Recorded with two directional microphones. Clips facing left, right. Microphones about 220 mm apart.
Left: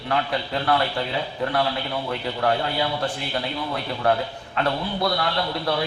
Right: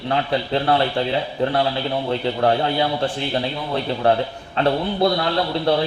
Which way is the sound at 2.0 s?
30° right (ahead or behind).